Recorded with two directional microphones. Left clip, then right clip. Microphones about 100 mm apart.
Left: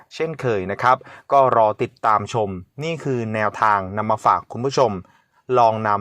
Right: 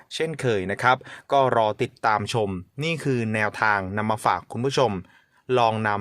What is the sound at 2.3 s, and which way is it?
Speech, 45° right (ahead or behind).